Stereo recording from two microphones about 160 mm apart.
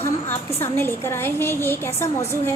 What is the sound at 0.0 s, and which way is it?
A woman's voice, 15° left (ahead or behind).